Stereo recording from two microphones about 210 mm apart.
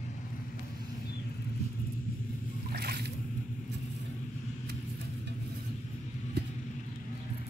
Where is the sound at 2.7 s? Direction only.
50° right (ahead or behind).